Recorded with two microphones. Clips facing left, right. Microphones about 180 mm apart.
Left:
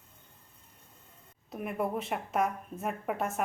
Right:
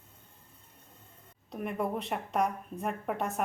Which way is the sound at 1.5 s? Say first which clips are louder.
Even; 5° left (ahead or behind).